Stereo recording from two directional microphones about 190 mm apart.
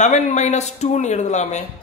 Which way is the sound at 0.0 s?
40° left (ahead or behind).